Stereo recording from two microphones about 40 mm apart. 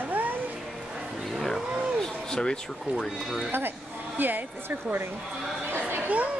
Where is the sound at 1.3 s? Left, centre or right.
Centre.